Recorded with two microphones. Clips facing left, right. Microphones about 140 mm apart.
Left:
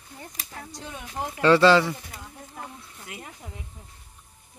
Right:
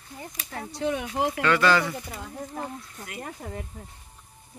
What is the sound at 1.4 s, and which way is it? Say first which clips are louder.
Speech: left 6 dB; 30° left (ahead or behind).